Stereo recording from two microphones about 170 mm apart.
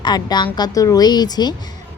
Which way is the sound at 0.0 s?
25° left (ahead or behind).